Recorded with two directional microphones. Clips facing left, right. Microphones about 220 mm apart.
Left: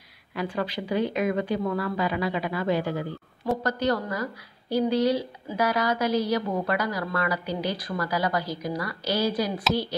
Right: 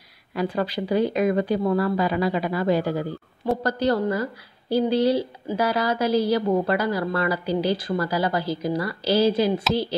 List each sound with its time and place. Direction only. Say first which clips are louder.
0.3 s a woman's voice: right 4 dB; 40° right (ahead or behind)